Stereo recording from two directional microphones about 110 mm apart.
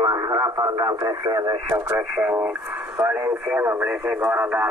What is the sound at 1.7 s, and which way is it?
Speech, 25° right (ahead or behind).